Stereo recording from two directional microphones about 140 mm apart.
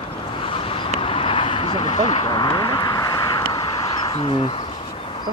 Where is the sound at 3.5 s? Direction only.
40° left (ahead or behind).